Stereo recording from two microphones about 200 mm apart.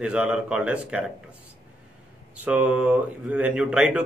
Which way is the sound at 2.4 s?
5° right (ahead or behind).